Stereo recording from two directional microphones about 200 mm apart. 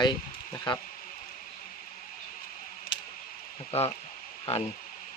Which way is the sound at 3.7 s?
30° left (ahead or behind).